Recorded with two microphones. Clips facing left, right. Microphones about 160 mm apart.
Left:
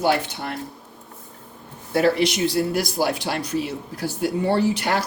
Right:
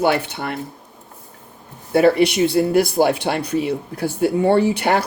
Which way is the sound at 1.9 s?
60° right (ahead or behind).